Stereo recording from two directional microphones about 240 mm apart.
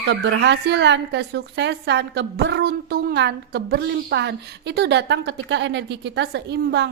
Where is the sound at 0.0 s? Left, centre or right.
Right.